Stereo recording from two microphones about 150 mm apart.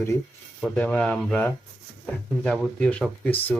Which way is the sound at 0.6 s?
10° left (ahead or behind).